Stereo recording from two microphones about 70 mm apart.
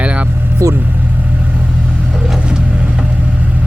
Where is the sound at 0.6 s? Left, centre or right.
Right.